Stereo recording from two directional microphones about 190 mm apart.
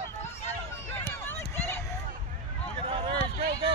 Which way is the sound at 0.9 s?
10° left (ahead or behind).